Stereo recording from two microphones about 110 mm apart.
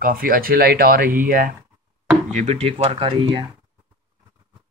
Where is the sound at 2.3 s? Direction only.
85° right; by 3.5 s 45° right (ahead or behind).